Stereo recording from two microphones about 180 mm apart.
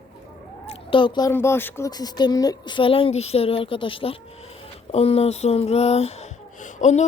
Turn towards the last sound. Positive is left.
turn(degrees=40)  # may be behind; listen again after turning